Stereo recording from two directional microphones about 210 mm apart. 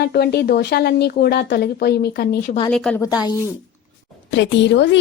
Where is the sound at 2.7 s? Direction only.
5° left (ahead or behind).